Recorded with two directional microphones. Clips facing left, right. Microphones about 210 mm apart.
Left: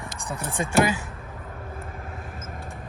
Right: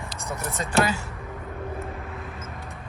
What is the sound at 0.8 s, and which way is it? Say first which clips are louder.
Speech: left 1 dB; 15° left (ahead or behind).